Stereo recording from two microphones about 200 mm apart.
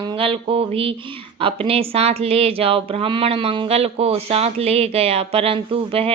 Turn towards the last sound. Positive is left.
turn(degrees=-30)  # may be behind; listen again after turning